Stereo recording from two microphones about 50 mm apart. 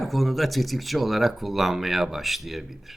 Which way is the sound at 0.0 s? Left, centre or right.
Centre.